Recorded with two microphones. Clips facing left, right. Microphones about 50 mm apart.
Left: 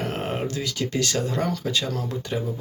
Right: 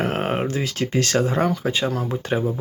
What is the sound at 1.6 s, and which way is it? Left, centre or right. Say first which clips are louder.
Speech: right 4 dB; right.